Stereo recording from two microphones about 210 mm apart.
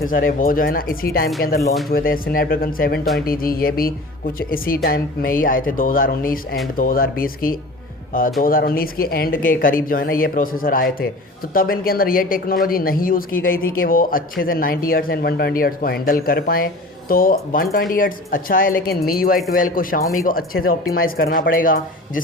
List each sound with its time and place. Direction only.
0.1 s speech: 40° left (ahead or behind)